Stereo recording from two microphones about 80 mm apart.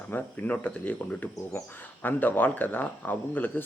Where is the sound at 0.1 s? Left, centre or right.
Left.